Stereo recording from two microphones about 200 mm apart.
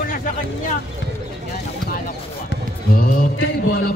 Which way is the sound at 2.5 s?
50° left (ahead or behind).